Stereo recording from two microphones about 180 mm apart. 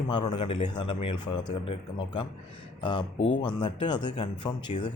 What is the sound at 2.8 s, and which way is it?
Speech, 25° left (ahead or behind).